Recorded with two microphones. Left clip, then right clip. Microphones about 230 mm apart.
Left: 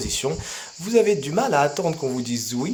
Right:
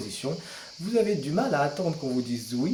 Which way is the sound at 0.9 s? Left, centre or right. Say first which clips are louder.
Left 7 dB; left.